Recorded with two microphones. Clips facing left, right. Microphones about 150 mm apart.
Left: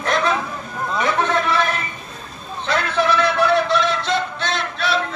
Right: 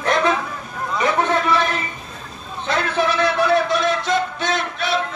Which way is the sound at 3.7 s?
15° right (ahead or behind).